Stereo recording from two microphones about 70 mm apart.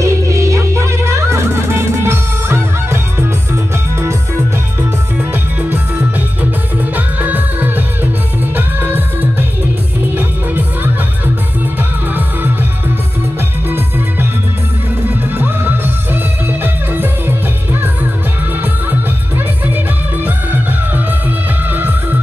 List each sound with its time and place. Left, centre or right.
0.0 s music: right
7.0 s music: right
10.1 s music: right
13.7 s music: right
15.0 s music: right
18.6 s music: right
21.6 s music: right